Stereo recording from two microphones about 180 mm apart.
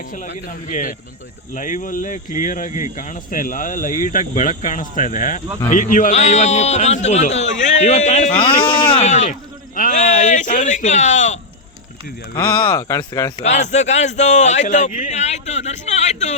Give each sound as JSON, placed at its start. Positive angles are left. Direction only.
{"t": 0.4, "sound": "a man's voice", "side_deg": 45}
{"t": 9.0, "sound": "a man's voice", "side_deg": 40}
{"t": 12.7, "sound": "speech", "side_deg": 15}
{"t": 13.3, "sound": "a man's voice", "side_deg": 40}